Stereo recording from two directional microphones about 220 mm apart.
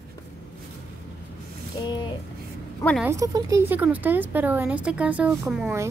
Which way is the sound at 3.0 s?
15° right (ahead or behind).